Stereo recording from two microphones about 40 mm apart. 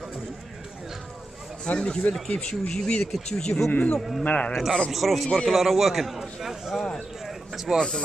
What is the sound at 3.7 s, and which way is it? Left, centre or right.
Speech, left.